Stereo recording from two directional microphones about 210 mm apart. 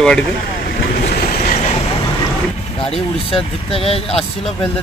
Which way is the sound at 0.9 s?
40° left (ahead or behind).